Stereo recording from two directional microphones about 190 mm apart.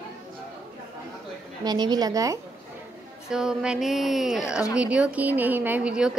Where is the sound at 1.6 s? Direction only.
20° right (ahead or behind).